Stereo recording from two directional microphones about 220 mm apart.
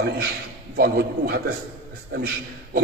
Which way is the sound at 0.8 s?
45° right (ahead or behind).